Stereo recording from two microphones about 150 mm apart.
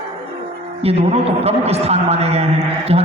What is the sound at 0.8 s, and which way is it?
A man's voice, 45° right (ahead or behind).